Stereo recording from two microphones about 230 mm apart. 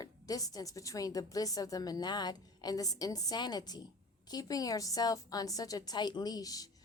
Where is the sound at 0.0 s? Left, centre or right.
Centre.